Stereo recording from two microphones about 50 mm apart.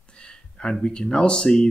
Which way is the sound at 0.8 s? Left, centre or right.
Centre.